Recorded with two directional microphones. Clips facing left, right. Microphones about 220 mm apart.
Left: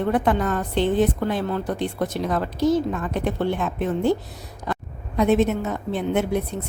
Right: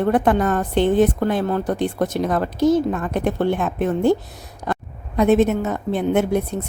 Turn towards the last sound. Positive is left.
turn(degrees=-45)  # may be behind; listen again after turning